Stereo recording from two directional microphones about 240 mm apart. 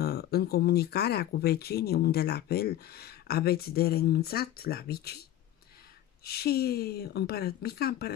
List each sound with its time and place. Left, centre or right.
0.0 s speech: left
6.2 s speech: left